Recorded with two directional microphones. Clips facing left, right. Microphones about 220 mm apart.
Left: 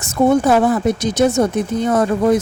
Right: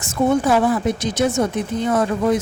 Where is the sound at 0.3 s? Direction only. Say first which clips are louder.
Left 3 dB; 50° left (ahead or behind).